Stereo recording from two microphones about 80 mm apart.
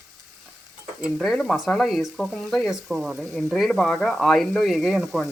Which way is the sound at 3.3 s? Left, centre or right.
Centre.